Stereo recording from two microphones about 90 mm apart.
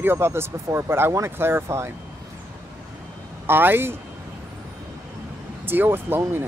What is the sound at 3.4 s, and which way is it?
Speech, 25° right (ahead or behind).